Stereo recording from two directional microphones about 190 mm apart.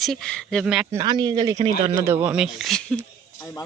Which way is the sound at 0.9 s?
20° right (ahead or behind).